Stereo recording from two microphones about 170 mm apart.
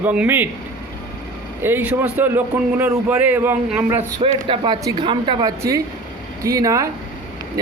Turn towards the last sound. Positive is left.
turn(degrees=-20)  # may be behind; listen again after turning